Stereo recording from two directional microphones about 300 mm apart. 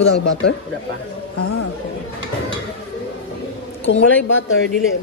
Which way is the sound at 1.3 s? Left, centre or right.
Left.